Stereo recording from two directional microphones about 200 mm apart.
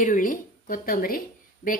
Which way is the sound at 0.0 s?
40° left (ahead or behind).